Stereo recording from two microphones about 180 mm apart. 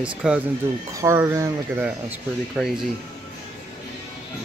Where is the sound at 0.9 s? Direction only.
15° right (ahead or behind).